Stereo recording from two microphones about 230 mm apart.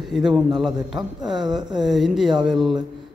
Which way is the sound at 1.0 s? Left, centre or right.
Centre.